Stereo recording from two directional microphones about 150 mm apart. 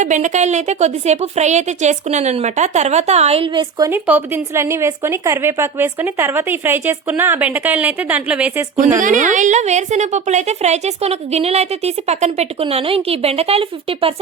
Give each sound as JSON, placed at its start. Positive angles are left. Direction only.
{"t": 0.0, "sound": "a woman's voice", "side_deg": -55}
{"t": 3.8, "sound": "speech", "side_deg": -10}
{"t": 9.0, "sound": "a woman's voice", "side_deg": -60}